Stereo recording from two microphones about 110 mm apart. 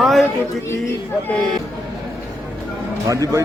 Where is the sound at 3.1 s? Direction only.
30° right (ahead or behind).